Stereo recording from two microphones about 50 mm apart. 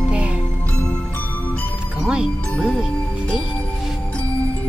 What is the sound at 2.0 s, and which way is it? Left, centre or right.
Music, centre.